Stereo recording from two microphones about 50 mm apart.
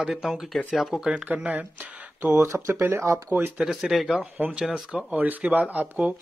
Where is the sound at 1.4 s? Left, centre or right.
Right.